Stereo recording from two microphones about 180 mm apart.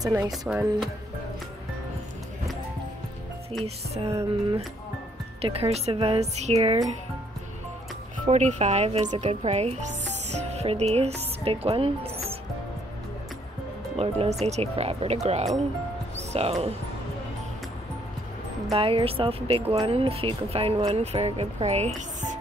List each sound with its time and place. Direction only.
0.0 s speech: 15° right (ahead or behind)
3.6 s speech: 35° right (ahead or behind)
4.3 s music: 30° right (ahead or behind)
5.4 s speech: 35° right (ahead or behind)
8.3 s speech: 40° right (ahead or behind)
13.9 s speech: 35° right (ahead or behind)
18.7 s speech: 30° right (ahead or behind)